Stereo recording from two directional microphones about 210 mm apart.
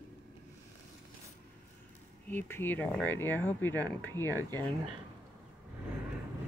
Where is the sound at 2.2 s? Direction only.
10° left (ahead or behind).